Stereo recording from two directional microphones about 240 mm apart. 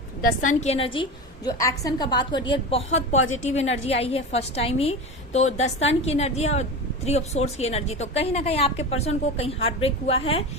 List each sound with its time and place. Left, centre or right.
0.2 s a woman's voice: left